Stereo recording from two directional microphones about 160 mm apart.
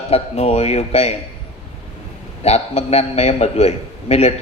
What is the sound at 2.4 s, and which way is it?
A man's voice, 40° left (ahead or behind).